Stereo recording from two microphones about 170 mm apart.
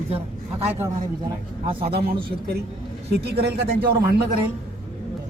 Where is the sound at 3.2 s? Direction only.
70° right (ahead or behind).